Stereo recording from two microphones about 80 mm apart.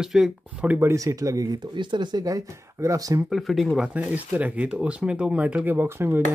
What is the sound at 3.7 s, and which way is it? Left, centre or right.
Speech, centre.